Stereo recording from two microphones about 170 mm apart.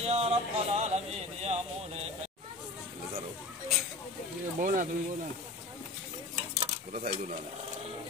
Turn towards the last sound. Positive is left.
turn(degrees=-40)  # may be behind; listen again after turning